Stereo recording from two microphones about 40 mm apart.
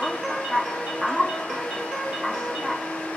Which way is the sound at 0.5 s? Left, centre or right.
Centre.